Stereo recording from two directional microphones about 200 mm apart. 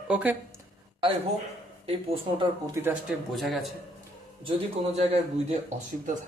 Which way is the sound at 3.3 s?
Centre (ahead or behind).